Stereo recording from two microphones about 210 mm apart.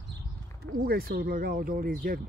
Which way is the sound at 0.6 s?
45° right (ahead or behind).